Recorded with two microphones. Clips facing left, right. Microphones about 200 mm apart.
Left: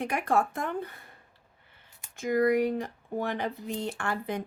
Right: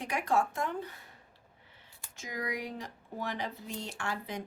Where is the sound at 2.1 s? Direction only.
55° left (ahead or behind).